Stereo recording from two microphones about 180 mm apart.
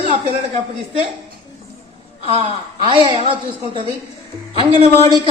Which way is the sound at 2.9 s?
30° right (ahead or behind).